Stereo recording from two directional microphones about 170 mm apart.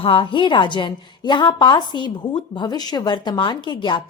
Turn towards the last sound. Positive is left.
turn(degrees=25)  # may be behind; listen again after turning